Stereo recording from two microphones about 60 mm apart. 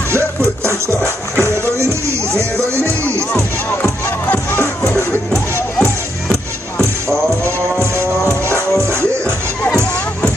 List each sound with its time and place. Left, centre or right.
0.1 s music: right
5.6 s music: left
7.8 s music: right